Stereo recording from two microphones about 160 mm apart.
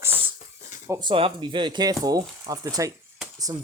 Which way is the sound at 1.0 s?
30° right (ahead or behind).